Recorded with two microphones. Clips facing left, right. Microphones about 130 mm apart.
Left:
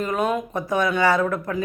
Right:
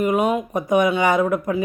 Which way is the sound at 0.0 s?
15° right (ahead or behind).